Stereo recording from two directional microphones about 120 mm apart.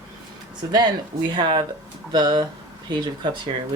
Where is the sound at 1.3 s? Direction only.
40° right (ahead or behind).